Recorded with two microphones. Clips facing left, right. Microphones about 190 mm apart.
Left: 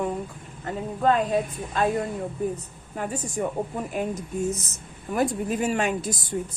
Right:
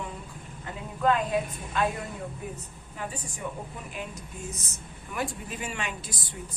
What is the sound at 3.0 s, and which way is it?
A woman's voice, 50° left (ahead or behind).